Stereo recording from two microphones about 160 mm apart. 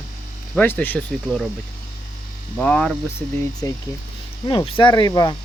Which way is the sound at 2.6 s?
5° left (ahead or behind).